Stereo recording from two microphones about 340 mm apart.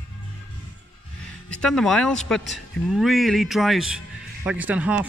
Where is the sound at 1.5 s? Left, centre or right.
Centre.